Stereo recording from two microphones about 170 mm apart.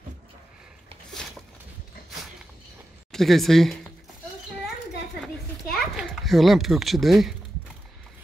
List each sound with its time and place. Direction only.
3.1 s speech: centre (ahead or behind)
5.7 s a child's voice: centre (ahead or behind)